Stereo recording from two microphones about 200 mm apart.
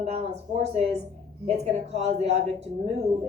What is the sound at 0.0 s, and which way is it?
Speech, 30° right (ahead or behind).